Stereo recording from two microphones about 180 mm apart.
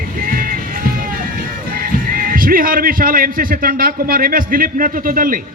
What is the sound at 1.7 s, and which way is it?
A man's voice, 50° right (ahead or behind).